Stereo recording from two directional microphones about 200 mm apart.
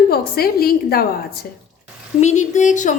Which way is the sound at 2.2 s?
35° left (ahead or behind).